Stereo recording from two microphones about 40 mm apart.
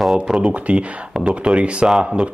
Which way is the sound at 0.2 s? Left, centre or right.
Right.